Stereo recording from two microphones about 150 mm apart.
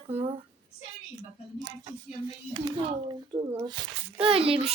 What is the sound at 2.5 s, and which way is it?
A child's voice, 30° right (ahead or behind).